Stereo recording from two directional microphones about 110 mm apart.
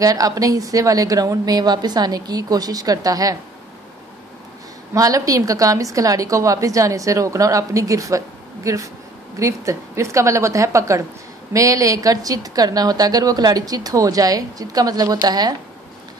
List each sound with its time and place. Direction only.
0.0 s a woman's voice: 35° right (ahead or behind)
4.9 s a woman's voice: 30° right (ahead or behind)